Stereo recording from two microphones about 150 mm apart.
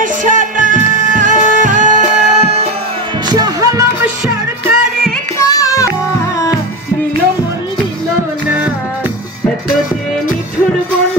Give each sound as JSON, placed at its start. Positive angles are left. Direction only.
{"t": 0.0, "sound": "music", "side_deg": -60}
{"t": 3.3, "sound": "music", "side_deg": -25}
{"t": 4.0, "sound": "music", "side_deg": -10}
{"t": 5.4, "sound": "music", "side_deg": 20}